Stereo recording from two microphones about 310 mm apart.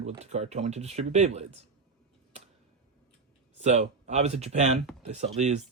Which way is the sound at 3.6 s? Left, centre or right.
Right.